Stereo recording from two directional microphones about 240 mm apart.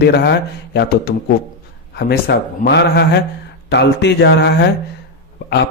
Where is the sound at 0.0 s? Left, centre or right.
Left.